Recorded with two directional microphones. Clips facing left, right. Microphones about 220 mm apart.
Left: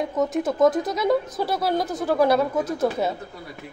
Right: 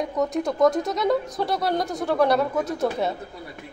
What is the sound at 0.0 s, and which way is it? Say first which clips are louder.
Speech: left 1 dB; centre (ahead or behind).